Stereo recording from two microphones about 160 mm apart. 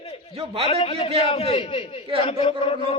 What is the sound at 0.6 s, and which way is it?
A man's voice, 35° left (ahead or behind).